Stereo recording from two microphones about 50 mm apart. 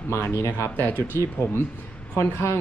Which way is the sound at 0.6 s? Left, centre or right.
Left.